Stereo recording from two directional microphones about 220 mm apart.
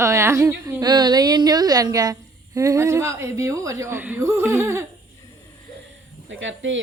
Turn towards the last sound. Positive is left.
turn(degrees=-60)  # may be behind; listen again after turning